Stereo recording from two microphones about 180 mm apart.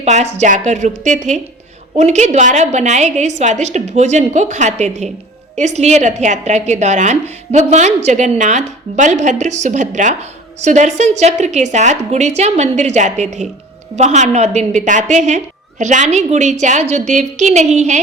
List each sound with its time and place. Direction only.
0.0 s a woman's voice: 40° right (ahead or behind)